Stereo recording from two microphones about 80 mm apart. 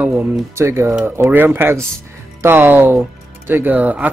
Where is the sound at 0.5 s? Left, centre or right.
Right.